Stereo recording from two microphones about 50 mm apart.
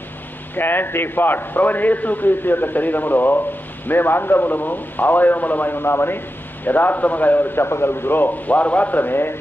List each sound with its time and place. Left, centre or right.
0.6 s a man's voice: left